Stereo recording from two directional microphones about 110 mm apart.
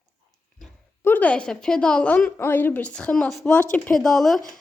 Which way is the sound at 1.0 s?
15° left (ahead or behind).